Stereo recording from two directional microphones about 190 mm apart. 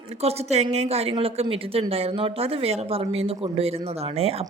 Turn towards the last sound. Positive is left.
turn(degrees=-30)  # may be behind; listen again after turning